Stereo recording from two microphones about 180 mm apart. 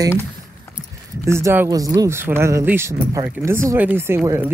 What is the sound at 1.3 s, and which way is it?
Speech, 15° right (ahead or behind).